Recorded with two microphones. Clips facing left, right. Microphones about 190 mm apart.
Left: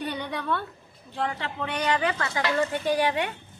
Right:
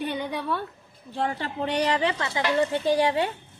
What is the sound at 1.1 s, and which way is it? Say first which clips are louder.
A woman's voice: right 2 dB; 30° right (ahead or behind).